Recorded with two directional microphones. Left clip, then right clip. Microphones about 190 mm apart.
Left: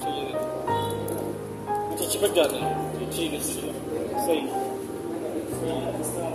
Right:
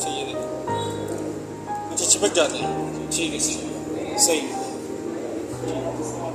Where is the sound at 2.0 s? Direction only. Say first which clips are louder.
Right 4 dB; centre (ahead or behind).